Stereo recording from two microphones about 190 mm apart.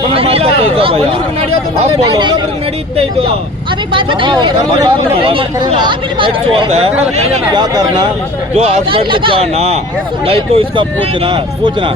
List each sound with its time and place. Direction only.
0.1 s speech: 30° right (ahead or behind)
2.0 s speech: 20° right (ahead or behind)
3.9 s speech: 25° right (ahead or behind)
8.5 s speech: 30° right (ahead or behind)